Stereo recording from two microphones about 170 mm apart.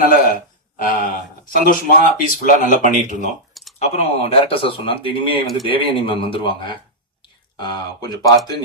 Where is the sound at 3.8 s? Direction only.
35° left (ahead or behind).